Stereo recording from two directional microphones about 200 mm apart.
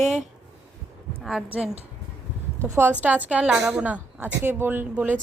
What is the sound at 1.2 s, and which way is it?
A woman's voice, centre (ahead or behind).